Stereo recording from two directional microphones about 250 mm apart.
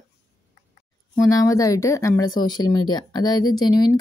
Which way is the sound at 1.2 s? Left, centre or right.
Centre.